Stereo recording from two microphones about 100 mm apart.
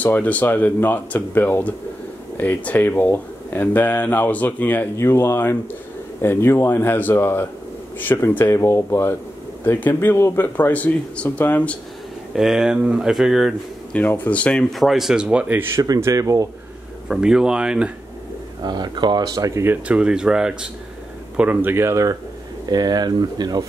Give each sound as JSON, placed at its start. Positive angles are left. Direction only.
{"t": 0.0, "sound": "speech", "side_deg": 15}
{"t": 12.4, "sound": "speech", "side_deg": -5}
{"t": 13.9, "sound": "speech", "side_deg": 20}
{"t": 15.8, "sound": "speech", "side_deg": -35}
{"t": 17.1, "sound": "speech", "side_deg": -5}
{"t": 18.6, "sound": "speech", "side_deg": -45}
{"t": 19.6, "sound": "speech", "side_deg": -20}
{"t": 20.0, "sound": "speech", "side_deg": -10}
{"t": 22.7, "sound": "speech", "side_deg": -45}